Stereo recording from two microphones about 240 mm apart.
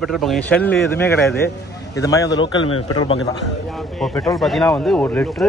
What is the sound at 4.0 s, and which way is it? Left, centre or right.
A man's voice, centre.